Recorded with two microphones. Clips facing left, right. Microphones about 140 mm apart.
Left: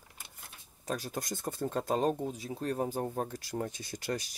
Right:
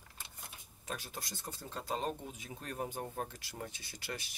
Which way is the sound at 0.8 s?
40° left (ahead or behind).